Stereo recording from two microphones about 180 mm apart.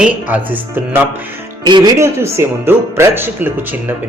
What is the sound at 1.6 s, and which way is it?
Speech, 25° right (ahead or behind).